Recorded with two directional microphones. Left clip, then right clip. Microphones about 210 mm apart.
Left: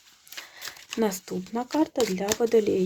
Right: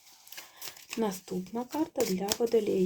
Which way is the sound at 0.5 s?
20° left (ahead or behind).